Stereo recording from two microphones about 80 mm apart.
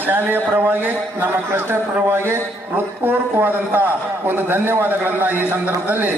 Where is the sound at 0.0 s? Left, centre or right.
Right.